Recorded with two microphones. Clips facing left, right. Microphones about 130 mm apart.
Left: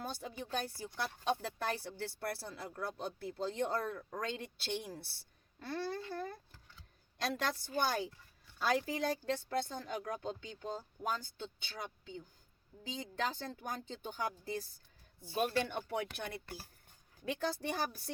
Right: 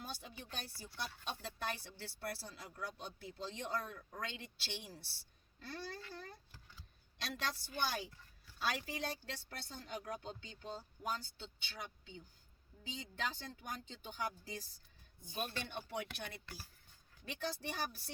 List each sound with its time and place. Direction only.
0.0 s speech: 45° left (ahead or behind)
15.9 s speech: 45° left (ahead or behind)